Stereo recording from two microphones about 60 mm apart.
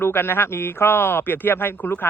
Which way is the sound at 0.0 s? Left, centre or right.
Left.